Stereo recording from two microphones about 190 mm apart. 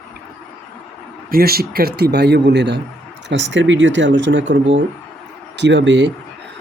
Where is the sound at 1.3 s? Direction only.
50° right (ahead or behind).